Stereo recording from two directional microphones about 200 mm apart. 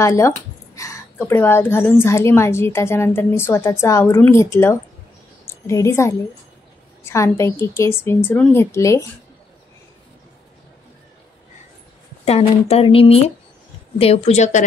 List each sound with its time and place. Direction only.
0.0 s a woman's voice: 15° left (ahead or behind)
12.3 s speech: 30° left (ahead or behind)